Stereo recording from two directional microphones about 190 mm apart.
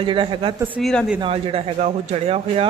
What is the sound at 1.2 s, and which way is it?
A man's voice, 30° right (ahead or behind).